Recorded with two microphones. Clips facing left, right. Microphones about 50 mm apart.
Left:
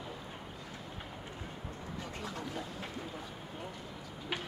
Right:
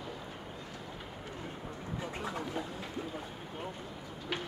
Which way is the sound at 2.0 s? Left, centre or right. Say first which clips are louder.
Right 4 dB; right.